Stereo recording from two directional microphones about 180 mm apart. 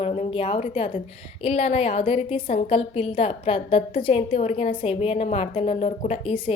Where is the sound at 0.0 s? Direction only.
30° left (ahead or behind).